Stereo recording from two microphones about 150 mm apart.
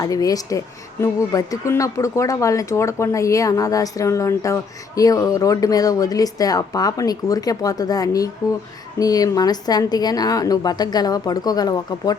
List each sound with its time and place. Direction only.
0.0 s speech: 25° left (ahead or behind)